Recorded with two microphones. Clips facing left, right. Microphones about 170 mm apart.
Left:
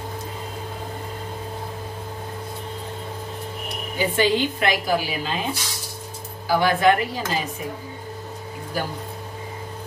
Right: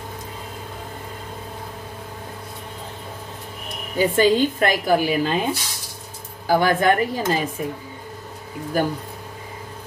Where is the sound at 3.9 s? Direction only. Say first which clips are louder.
Right 4 dB; 45° right (ahead or behind).